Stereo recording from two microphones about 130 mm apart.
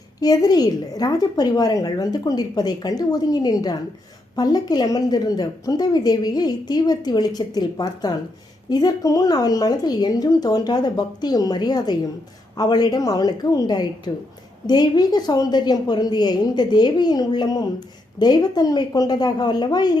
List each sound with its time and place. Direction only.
0.2 s a woman's voice: 30° left (ahead or behind)